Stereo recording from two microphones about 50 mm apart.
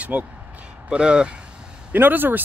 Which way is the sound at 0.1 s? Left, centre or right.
Right.